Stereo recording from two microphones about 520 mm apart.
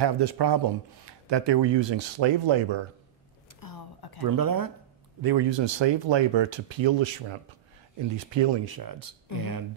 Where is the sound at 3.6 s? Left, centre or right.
Left.